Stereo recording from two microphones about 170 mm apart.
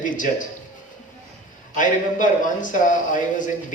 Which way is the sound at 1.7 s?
50° left (ahead or behind).